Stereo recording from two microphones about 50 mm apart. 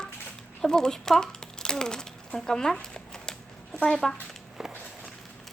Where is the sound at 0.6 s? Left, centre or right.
Centre.